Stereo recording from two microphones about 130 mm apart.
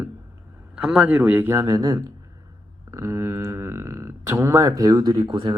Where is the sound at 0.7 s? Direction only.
5° right (ahead or behind).